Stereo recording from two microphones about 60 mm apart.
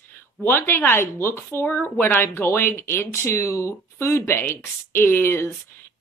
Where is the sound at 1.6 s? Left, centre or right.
Left.